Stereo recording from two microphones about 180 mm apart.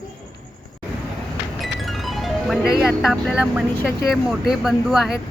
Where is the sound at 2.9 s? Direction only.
Centre (ahead or behind).